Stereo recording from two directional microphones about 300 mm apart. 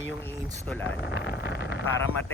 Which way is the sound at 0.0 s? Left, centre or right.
Centre.